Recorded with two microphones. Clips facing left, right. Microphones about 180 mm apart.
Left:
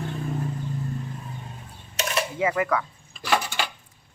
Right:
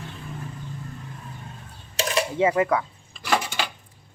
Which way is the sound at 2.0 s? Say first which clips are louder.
Right 3 dB; 30° right (ahead or behind).